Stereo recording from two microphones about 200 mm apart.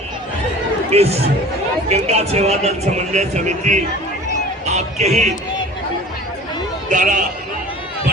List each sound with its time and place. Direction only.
0.9 s a man's voice: 30° right (ahead or behind)
4.7 s a sound: 35° right (ahead or behind)
6.9 s a man's voice: 40° right (ahead or behind)